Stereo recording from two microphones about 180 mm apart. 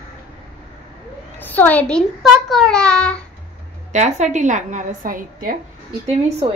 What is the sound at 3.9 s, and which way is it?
A woman's voice, 40° right (ahead or behind).